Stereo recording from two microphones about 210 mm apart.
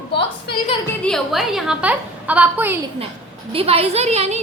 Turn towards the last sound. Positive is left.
turn(degrees=-30)  # may be behind; listen again after turning